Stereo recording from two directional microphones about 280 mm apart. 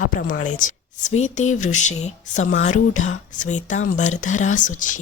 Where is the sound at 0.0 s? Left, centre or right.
Left.